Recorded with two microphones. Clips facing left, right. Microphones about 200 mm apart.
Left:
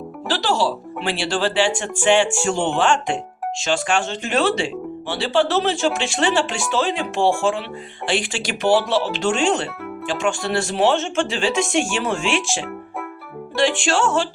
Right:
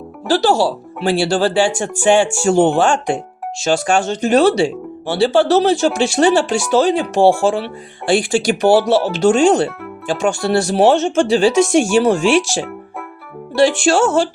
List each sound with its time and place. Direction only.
1.0 s speech: 40° right (ahead or behind)
8.3 s speech: 40° right (ahead or behind)
13.6 s speech: 40° right (ahead or behind)